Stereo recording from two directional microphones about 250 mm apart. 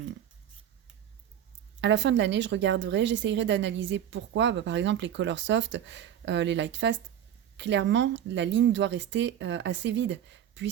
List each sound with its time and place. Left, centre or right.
1.8 s a woman's voice: right